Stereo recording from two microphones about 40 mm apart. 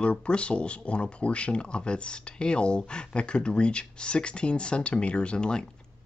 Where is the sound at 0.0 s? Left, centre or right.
Left.